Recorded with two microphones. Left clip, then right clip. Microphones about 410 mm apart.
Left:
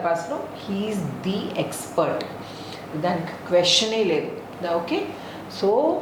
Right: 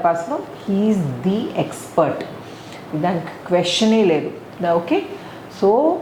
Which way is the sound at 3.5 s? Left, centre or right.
Right.